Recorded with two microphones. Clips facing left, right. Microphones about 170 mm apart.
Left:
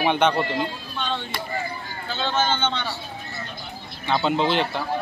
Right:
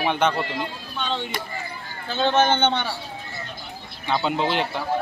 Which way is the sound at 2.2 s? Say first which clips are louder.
Right 5 dB; 60° right (ahead or behind).